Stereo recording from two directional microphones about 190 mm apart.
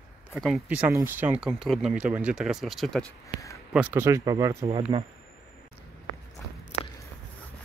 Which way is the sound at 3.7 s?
10° right (ahead or behind).